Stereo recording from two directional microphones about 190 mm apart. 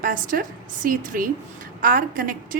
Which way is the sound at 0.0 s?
45° right (ahead or behind).